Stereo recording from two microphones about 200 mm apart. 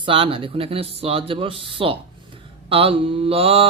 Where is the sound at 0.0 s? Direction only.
25° right (ahead or behind).